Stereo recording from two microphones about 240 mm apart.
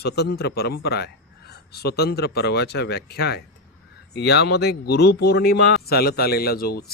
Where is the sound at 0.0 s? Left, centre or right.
Left.